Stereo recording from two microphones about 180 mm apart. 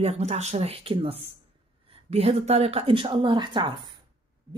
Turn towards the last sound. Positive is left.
turn(degrees=-25)  # may be behind; listen again after turning